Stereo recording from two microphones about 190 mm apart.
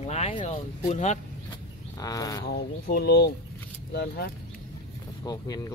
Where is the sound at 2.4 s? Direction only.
55° left (ahead or behind).